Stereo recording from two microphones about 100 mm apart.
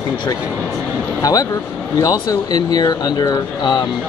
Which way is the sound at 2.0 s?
35° left (ahead or behind).